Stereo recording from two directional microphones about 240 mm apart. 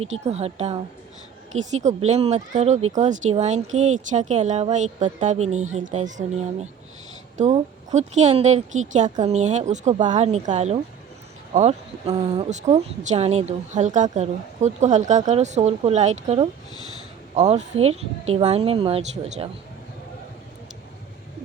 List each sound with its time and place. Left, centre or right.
0.0 s a woman's voice: right